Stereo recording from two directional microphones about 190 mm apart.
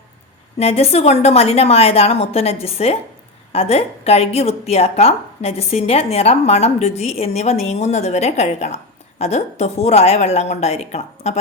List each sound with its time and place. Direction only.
0.6 s a woman's voice: 30° left (ahead or behind)